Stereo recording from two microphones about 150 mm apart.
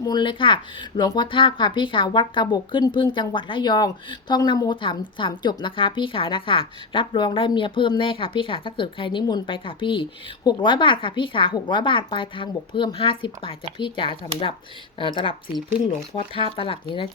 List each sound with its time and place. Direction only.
0.0 s speech: 30° left (ahead or behind)